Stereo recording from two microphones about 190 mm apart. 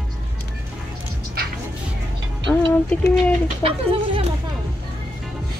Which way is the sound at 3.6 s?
30° right (ahead or behind).